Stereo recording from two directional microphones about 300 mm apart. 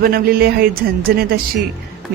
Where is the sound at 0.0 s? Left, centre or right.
Right.